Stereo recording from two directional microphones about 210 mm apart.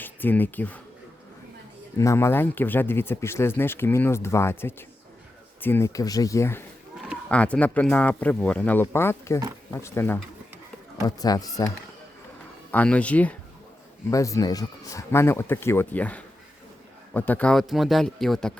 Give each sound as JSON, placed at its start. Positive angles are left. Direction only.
{"t": 0.0, "sound": "speech", "side_deg": 10}
{"t": 2.0, "sound": "speech", "side_deg": 15}
{"t": 11.2, "sound": "speech", "side_deg": 15}